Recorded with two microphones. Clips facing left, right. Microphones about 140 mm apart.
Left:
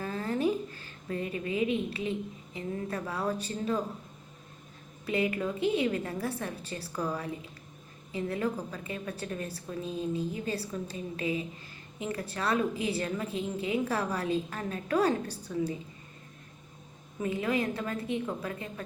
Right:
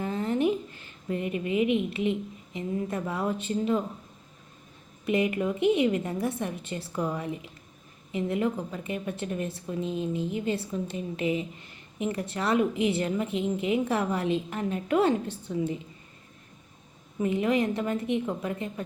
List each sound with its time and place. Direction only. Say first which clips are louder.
0.0 s a woman's voice: right 4 dB; 20° right (ahead or behind)
5.0 s a woman's voice: right 4 dB; 20° right (ahead or behind)
17.2 s a woman's voice: right 5 dB; 20° right (ahead or behind)